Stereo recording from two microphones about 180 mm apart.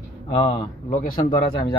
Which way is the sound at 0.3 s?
30° left (ahead or behind).